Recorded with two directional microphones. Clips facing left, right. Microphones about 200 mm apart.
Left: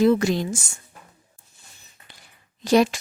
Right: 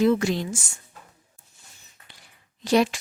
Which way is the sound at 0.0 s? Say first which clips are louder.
Left 2 dB; 40° left (ahead or behind).